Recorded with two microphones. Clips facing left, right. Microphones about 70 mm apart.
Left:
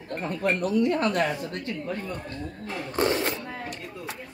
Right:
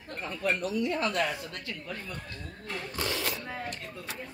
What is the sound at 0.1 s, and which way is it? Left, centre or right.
Speech, left.